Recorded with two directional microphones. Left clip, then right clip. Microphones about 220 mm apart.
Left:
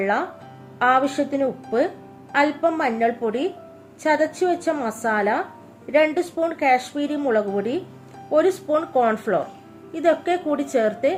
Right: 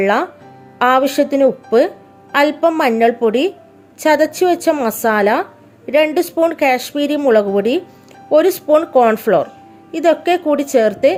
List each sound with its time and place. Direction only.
0.0 s a woman's voice: 45° right (ahead or behind)